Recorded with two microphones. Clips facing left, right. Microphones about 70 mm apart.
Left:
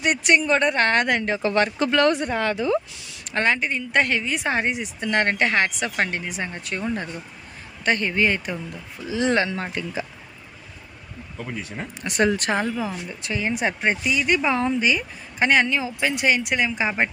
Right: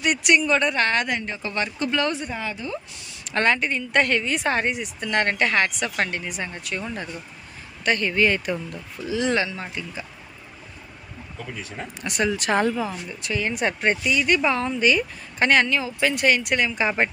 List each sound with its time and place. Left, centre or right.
0.0 s speech: left
1.0 s speech: left
3.3 s speech: centre; by 6.8 s left
7.8 s speech: left
9.1 s speech: left
9.5 s speech: left
12.0 s speech: left
12.5 s speech: centre
13.2 s speech: left